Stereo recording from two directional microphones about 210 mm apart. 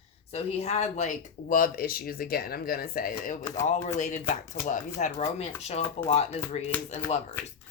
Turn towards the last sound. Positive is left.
turn(degrees=30)  # may be behind; listen again after turning